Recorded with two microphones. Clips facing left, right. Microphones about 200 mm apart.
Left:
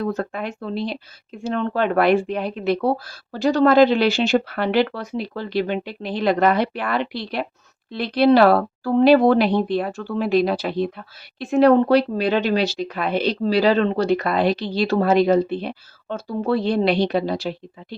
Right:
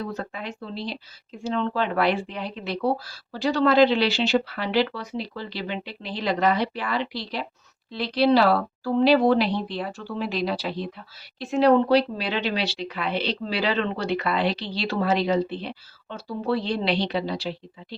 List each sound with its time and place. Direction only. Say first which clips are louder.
0.0 s speech: left 7 dB; 50° left (ahead or behind)